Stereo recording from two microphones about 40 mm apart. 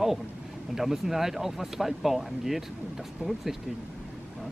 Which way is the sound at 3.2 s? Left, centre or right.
Right.